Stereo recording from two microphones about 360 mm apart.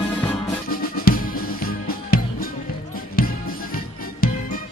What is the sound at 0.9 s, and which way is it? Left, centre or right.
Music, left.